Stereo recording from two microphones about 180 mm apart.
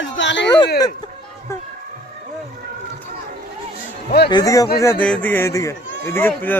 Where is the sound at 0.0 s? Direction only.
85° left.